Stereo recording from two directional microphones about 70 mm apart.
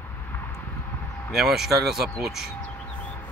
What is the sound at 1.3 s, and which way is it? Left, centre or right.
Speech, centre.